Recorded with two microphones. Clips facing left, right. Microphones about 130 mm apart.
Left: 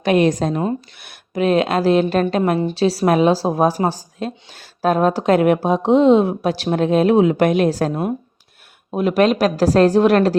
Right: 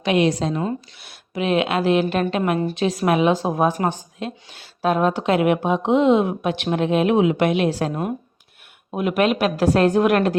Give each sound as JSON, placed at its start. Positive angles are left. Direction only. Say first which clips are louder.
{"t": 0.0, "sound": "a woman's voice", "louder": "left 3 dB", "side_deg": 45}